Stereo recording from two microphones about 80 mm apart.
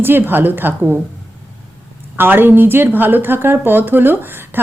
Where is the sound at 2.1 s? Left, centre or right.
Right.